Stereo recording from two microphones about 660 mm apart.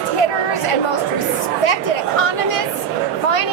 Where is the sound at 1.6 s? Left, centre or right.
Left.